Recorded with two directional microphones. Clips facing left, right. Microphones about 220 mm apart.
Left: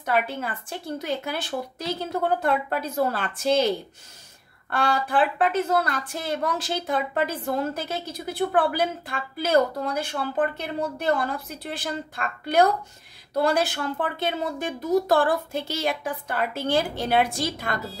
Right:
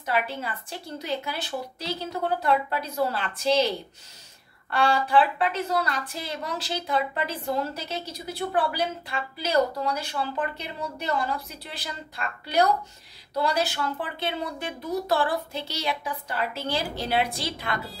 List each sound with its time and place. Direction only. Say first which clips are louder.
0.0 s a woman's voice: left 3 dB; 50° left (ahead or behind)